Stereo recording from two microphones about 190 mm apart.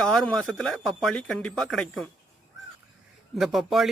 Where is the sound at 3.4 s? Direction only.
Centre (ahead or behind).